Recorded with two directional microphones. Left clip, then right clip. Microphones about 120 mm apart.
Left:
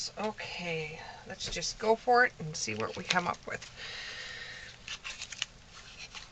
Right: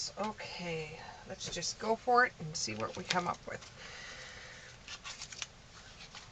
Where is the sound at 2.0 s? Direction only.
30° left (ahead or behind).